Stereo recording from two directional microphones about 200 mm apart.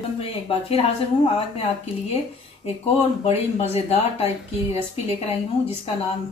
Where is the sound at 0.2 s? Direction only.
30° left (ahead or behind).